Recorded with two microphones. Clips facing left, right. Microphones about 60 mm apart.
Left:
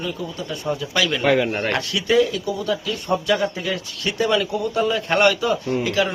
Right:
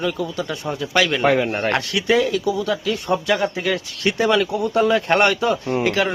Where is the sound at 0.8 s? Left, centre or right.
Right.